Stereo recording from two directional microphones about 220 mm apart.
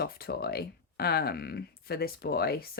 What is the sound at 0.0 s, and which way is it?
A woman's voice, 45° left (ahead or behind).